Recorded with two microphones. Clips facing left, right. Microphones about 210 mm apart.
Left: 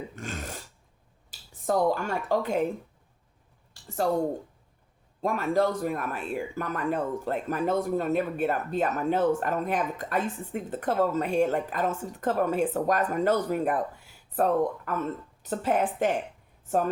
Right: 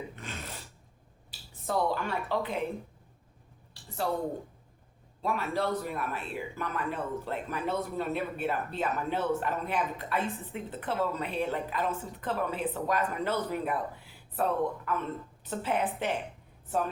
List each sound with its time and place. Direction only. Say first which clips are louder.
0.2 s filing: left 5 dB; 45° left (ahead or behind)
1.3 s speech: left 5 dB; 45° left (ahead or behind)
3.8 s speech: left 6 dB; 45° left (ahead or behind)
5.2 s speech: left 6 dB; 45° left (ahead or behind)